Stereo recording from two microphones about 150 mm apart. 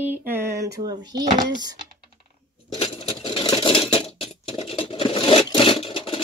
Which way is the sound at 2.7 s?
45° left (ahead or behind).